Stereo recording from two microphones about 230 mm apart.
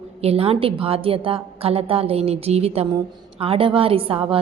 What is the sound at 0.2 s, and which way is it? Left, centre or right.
A woman's voice, right.